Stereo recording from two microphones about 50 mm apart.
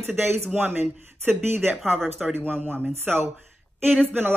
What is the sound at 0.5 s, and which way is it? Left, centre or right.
Speech, right.